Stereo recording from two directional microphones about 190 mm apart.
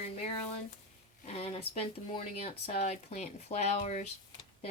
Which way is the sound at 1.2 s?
30° left (ahead or behind).